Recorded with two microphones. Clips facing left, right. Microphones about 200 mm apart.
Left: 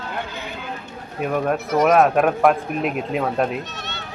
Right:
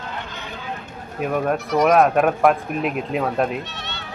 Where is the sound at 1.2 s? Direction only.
Centre (ahead or behind).